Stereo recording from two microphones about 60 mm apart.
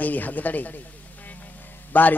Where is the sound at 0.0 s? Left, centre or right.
Left.